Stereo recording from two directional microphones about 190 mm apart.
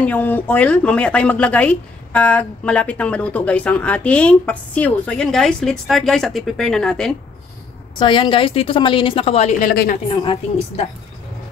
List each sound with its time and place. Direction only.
0.0 s speech: 10° left (ahead or behind)
8.0 s a woman's voice: 25° left (ahead or behind); by 9.9 s 45° left (ahead or behind)
10.0 s a woman's voice: 30° left (ahead or behind)